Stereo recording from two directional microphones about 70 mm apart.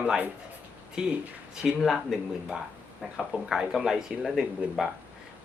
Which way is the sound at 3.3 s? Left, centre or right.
Centre.